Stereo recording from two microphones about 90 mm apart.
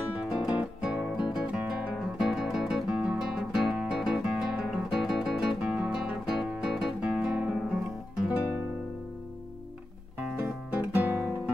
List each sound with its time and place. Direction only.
0.2 s music: 10° right (ahead or behind)
10.8 s guitar: 15° right (ahead or behind)